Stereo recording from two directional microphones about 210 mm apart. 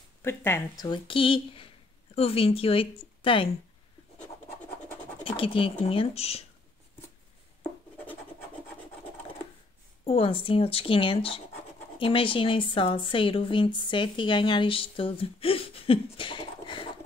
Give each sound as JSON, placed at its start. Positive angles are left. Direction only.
{"t": 0.2, "sound": "speech", "side_deg": 10}
{"t": 5.2, "sound": "speech", "side_deg": 25}
{"t": 10.0, "sound": "speech", "side_deg": 25}